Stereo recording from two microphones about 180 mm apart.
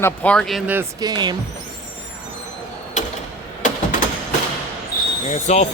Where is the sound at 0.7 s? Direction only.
15° right (ahead or behind).